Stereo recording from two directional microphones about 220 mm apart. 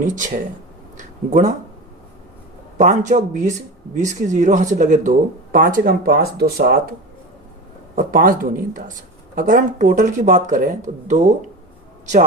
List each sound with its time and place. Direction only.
0.0 s speech: 35° right (ahead or behind)
2.7 s speech: 35° right (ahead or behind)
7.9 s speech: 40° right (ahead or behind)